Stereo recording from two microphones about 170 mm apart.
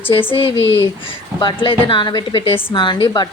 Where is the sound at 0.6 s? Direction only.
90° left.